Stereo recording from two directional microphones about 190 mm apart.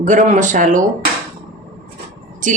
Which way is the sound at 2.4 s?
45° right (ahead or behind).